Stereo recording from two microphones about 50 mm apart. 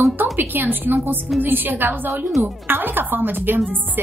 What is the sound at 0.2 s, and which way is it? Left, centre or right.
A woman's voice, right.